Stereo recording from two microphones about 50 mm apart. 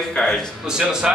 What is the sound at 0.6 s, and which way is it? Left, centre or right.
Speech, centre.